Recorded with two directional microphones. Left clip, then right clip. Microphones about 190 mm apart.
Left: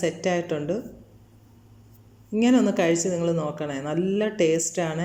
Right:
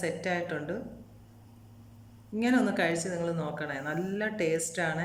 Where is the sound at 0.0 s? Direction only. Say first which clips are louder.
Left 7 dB; 15° left (ahead or behind).